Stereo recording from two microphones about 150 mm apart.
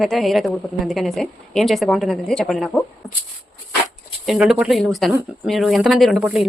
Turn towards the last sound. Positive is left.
turn(degrees=-5)  # may be behind; listen again after turning